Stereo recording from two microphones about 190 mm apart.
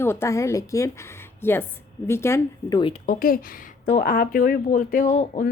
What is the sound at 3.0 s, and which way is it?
A woman's voice, 50° left (ahead or behind).